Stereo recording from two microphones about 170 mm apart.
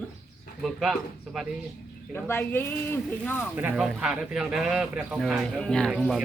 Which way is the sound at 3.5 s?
5° right (ahead or behind).